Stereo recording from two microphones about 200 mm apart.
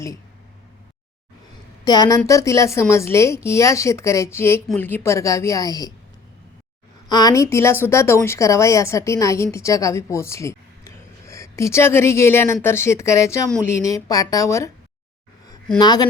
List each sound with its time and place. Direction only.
1.8 s speech: 20° left (ahead or behind)
7.1 s speech: 20° left (ahead or behind)
15.8 s speech: 20° left (ahead or behind)